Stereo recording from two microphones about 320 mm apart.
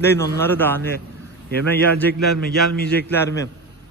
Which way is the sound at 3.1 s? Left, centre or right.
Centre.